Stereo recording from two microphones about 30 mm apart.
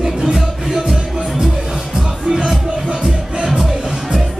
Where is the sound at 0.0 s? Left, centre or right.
Centre.